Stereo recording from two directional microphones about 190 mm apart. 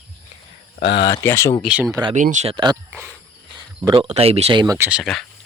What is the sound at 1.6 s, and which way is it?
Speech, 5° right (ahead or behind).